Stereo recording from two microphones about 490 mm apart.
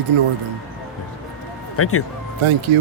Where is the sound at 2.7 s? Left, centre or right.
Right.